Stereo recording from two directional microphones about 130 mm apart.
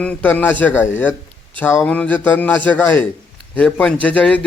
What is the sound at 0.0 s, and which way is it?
A man's voice, 10° left (ahead or behind).